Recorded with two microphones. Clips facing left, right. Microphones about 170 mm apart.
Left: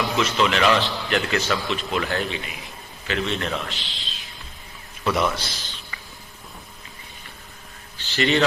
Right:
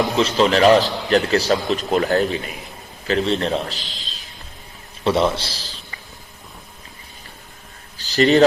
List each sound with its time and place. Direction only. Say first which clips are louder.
0.0 s a man's voice: right 5 dB; 35° right (ahead or behind)
5.0 s a man's voice: right 5 dB; 30° right (ahead or behind)
7.9 s a man's voice: right 7 dB; 40° right (ahead or behind)